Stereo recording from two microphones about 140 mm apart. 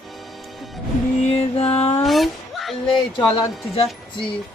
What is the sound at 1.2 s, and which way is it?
Music, 45° left (ahead or behind).